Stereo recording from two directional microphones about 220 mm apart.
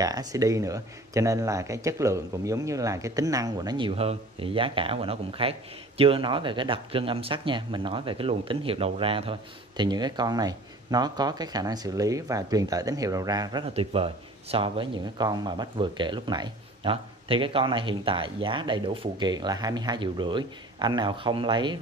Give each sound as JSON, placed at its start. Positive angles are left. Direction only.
{"t": 0.0, "sound": "speech", "side_deg": -15}